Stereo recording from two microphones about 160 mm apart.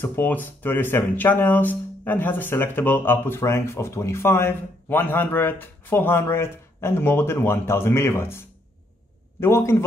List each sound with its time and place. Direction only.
0.0 s speech: 10° left (ahead or behind)